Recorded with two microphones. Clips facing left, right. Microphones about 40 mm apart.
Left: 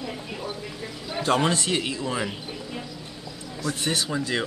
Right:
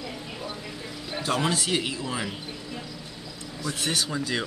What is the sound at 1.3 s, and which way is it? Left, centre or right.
Speech, left.